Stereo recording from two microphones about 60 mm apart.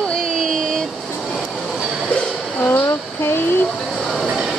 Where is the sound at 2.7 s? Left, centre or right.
Left.